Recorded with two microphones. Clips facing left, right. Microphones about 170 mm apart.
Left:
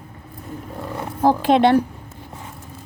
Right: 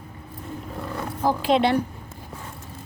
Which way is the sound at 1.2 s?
55° left (ahead or behind).